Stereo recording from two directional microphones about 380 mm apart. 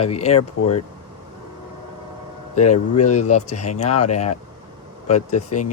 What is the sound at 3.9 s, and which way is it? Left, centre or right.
Speech, left.